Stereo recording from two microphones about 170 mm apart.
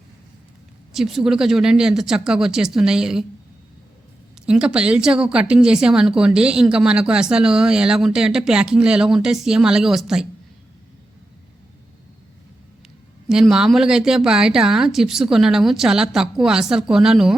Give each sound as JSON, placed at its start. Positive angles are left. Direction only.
{"t": 0.9, "sound": "a woman's voice", "side_deg": 0}
{"t": 4.4, "sound": "a woman's voice", "side_deg": -5}
{"t": 13.2, "sound": "a woman's voice", "side_deg": -5}